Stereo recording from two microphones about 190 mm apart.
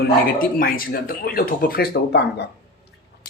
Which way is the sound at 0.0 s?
50° left (ahead or behind).